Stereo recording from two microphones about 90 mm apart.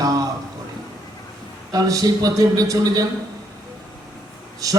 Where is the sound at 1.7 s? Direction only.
45° right (ahead or behind).